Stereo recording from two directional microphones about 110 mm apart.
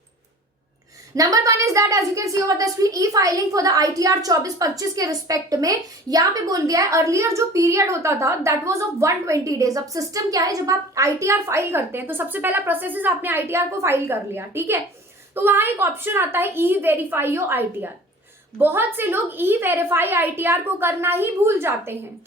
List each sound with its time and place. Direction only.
1.1 s a woman's voice: 30° right (ahead or behind)